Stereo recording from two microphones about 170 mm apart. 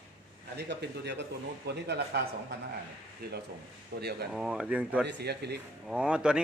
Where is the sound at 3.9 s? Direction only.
70° right (ahead or behind).